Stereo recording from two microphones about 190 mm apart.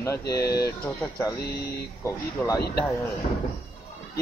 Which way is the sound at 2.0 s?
15° left (ahead or behind).